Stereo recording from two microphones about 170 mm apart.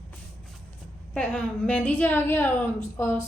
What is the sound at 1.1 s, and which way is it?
A woman's voice, 5° left (ahead or behind).